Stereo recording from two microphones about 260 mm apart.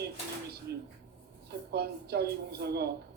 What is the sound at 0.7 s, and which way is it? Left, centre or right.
A woman's voice, right.